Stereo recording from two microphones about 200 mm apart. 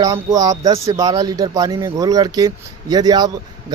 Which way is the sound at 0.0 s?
15° right (ahead or behind).